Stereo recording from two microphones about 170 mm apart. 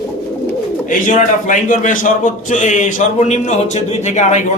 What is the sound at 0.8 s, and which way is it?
A man's voice, 50° left (ahead or behind).